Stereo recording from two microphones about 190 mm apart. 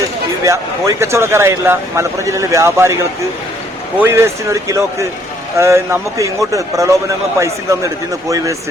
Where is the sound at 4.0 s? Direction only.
15° right (ahead or behind).